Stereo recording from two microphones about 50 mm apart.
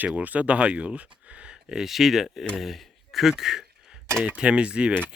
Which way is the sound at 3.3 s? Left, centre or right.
Centre.